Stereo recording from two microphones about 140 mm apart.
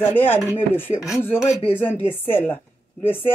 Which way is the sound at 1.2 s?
15° left (ahead or behind).